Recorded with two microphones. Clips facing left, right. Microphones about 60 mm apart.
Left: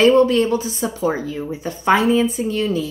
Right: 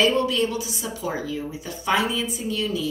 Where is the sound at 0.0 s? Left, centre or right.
Left.